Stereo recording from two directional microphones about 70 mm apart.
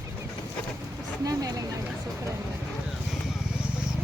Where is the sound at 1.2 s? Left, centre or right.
Right.